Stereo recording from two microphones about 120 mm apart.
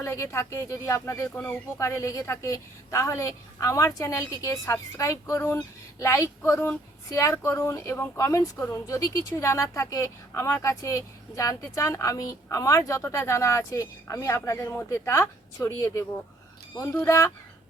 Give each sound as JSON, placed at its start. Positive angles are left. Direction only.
{"t": 0.0, "sound": "speech", "side_deg": 25}
{"t": 16.9, "sound": "speech", "side_deg": 15}